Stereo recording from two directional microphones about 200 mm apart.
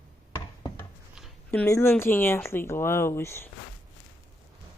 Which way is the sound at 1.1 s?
5° left (ahead or behind).